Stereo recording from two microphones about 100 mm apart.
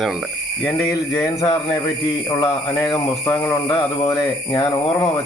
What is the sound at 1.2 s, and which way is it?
Speech, 55° left (ahead or behind).